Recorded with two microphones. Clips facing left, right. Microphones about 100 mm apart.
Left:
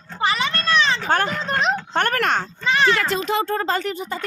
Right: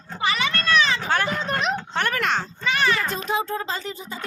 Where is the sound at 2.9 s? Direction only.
90° left; by 3.7 s 70° left (ahead or behind).